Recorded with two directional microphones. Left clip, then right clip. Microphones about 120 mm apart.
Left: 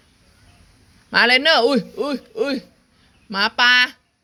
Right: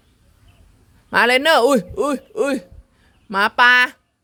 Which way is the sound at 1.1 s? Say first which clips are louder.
Even; 70° right (ahead or behind).